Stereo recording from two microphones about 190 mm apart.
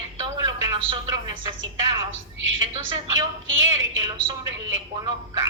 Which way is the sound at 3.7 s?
25° right (ahead or behind).